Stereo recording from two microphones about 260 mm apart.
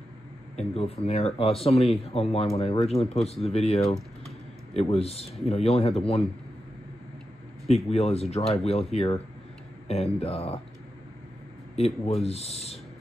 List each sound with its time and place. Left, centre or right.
0.6 s speech: left
7.6 s speech: left
11.7 s speech: left